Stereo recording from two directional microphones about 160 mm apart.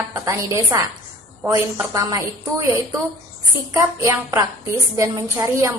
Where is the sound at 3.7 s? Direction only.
20° right (ahead or behind).